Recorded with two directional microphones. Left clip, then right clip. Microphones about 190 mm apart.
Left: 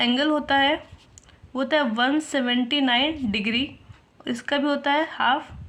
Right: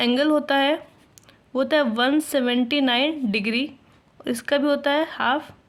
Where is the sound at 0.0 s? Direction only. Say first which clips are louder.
Right 2 dB; 55° right (ahead or behind).